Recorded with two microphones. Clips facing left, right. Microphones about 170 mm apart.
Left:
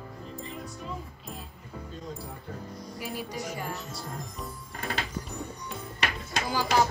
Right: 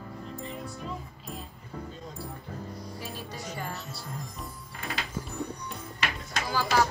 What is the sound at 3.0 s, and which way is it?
Speech, 10° left (ahead or behind).